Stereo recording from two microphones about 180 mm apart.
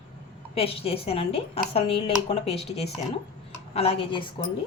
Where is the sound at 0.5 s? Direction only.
30° left (ahead or behind).